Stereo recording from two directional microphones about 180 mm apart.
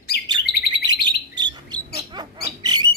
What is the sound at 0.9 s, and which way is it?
Bird, 25° right (ahead or behind).